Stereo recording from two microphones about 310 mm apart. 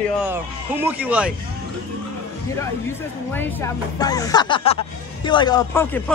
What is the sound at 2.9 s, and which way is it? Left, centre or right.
Speech, centre.